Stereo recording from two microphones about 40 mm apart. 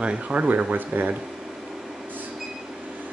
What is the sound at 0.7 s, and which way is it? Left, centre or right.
Speech, right.